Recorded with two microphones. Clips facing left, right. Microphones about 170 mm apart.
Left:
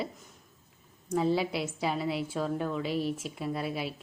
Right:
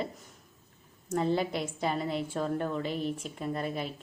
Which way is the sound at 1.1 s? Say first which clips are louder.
Left 1 dB; 5° left (ahead or behind).